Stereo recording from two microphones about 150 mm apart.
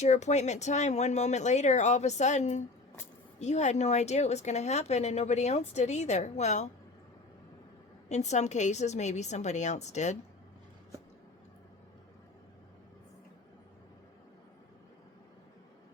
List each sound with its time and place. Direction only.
0.0 s a woman's voice: 50° left (ahead or behind)
8.1 s a woman's voice: 50° left (ahead or behind)